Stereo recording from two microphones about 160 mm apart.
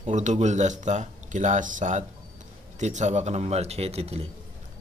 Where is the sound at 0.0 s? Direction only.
50° right (ahead or behind).